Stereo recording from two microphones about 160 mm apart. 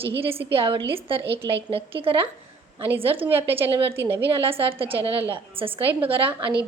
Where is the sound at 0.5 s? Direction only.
35° right (ahead or behind).